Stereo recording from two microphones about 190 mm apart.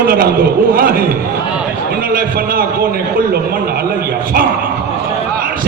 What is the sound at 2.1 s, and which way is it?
Speech, 50° right (ahead or behind).